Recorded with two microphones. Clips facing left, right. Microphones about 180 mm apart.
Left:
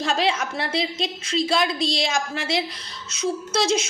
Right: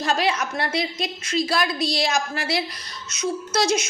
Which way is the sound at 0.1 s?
25° left (ahead or behind).